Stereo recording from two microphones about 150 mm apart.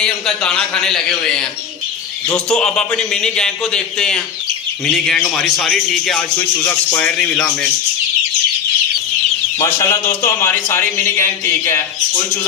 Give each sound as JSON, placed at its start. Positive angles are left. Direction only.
{"t": 0.0, "sound": "a man's voice", "side_deg": 5}
{"t": 9.6, "sound": "a man's voice", "side_deg": 20}